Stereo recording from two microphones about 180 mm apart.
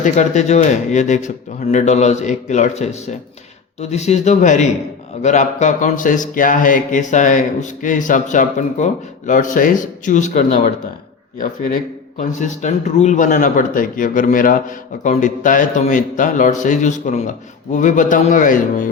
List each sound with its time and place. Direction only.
0.0 s speech: 40° left (ahead or behind)
12.1 s speech: 45° left (ahead or behind)